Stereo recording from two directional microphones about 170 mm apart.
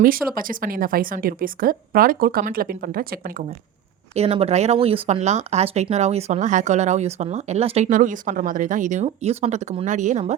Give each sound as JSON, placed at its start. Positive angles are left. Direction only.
{"t": 0.0, "sound": "a woman's voice", "side_deg": -55}
{"t": 4.1, "sound": "speech", "side_deg": -35}